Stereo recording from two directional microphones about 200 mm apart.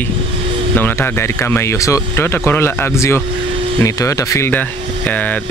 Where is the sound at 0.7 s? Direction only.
10° left (ahead or behind).